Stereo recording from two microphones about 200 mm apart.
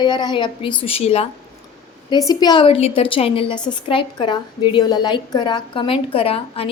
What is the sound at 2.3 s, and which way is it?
A woman's voice, 20° left (ahead or behind).